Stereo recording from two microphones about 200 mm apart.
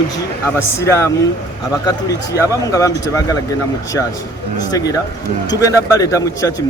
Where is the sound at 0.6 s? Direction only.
15° left (ahead or behind).